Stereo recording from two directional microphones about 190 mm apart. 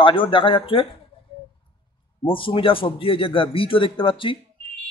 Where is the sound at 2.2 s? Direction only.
25° left (ahead or behind).